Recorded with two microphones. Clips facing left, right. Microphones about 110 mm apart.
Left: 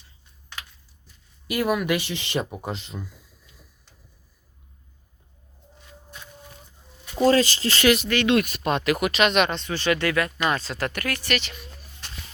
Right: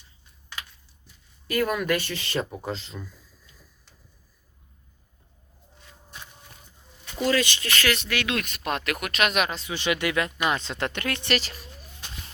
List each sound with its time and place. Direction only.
1.5 s speech: 10° left (ahead or behind)
7.2 s speech: 35° left (ahead or behind)
8.1 s speech: 5° right (ahead or behind); by 11.3 s 25° right (ahead or behind)
11.3 s speech: 35° right (ahead or behind)